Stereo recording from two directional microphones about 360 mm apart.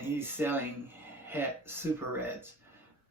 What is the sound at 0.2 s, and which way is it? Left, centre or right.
Speech, centre.